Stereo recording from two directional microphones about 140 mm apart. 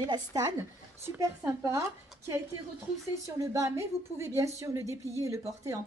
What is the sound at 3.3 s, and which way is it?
Speech, 20° right (ahead or behind).